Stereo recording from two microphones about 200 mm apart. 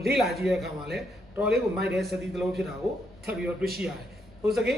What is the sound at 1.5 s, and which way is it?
Speech, 55° right (ahead or behind).